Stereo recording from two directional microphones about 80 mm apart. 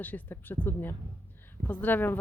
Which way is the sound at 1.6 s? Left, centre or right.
Left.